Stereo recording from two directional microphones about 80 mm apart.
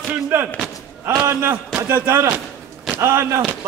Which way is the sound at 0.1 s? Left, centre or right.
Right.